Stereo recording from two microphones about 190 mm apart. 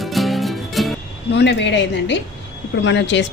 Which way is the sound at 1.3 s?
65° left (ahead or behind).